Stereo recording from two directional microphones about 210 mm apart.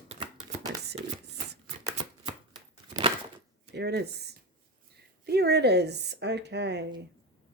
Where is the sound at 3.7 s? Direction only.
50° right (ahead or behind).